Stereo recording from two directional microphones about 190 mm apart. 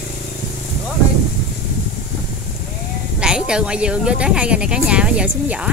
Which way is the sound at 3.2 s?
5° right (ahead or behind).